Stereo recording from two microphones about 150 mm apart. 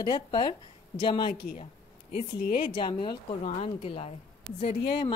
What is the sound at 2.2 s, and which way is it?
Speech, 70° left (ahead or behind).